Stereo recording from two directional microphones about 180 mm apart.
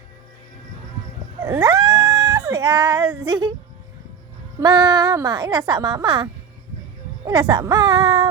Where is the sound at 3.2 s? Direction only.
25° right (ahead or behind).